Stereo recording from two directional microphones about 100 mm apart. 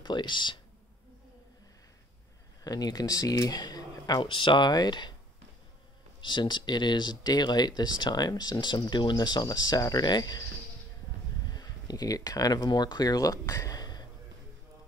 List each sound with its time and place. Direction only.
0.0 s speech: 50° left (ahead or behind)
2.6 s speech: 40° left (ahead or behind)
4.2 s speech: 55° left (ahead or behind)
6.2 s speech: 50° left (ahead or behind)
11.4 s speech: 40° left (ahead or behind)